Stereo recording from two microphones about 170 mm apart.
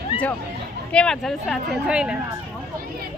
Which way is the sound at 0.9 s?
5° left (ahead or behind).